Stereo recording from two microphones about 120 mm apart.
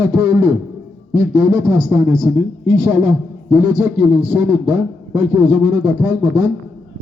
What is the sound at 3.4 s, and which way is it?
A man's voice, 20° right (ahead or behind).